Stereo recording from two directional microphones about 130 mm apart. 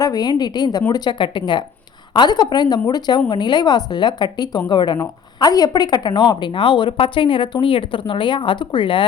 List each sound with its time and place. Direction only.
0.0 s a woman's voice: 30° left (ahead or behind)